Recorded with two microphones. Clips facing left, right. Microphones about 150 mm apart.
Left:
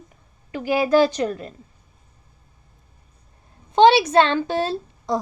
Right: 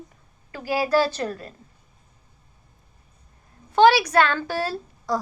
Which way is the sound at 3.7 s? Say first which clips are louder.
Left 2 dB; 25° left (ahead or behind).